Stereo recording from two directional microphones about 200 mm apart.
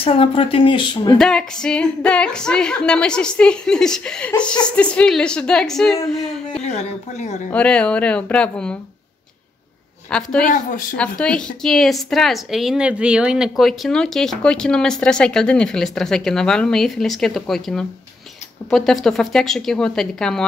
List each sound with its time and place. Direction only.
0.0 s speech: 30° left (ahead or behind)
1.1 s a woman's voice: 5° left (ahead or behind)
6.6 s speech: 35° left (ahead or behind)
7.5 s a woman's voice: 5° left (ahead or behind)
10.4 s speech: 40° left (ahead or behind)
11.0 s a woman's voice: 5° left (ahead or behind)